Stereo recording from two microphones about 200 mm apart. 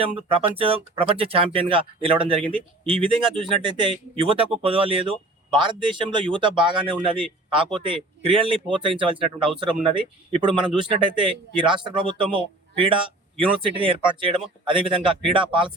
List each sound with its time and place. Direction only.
0.0 s speech: 30° right (ahead or behind)